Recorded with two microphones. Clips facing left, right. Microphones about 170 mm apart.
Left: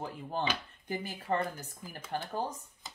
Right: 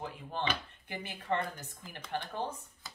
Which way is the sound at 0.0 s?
40° left (ahead or behind).